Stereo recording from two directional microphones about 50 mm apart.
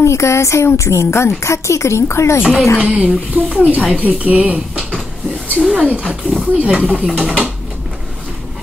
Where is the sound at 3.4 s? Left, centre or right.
Right.